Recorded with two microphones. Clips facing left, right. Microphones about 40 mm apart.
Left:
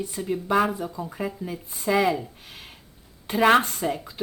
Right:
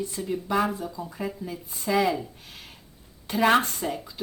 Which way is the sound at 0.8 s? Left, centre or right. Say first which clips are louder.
Left 2 dB; left.